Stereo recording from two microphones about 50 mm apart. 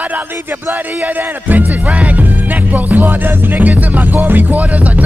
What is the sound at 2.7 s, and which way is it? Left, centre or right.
Music, right.